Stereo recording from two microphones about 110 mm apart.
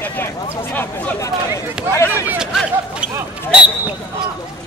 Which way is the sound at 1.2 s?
30° left (ahead or behind).